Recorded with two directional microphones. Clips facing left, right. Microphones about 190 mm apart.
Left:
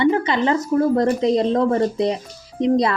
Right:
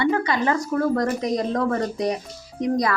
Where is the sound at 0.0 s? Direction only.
20° left (ahead or behind).